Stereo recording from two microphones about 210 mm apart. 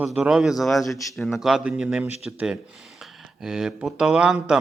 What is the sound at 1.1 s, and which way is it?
A man's voice, centre (ahead or behind).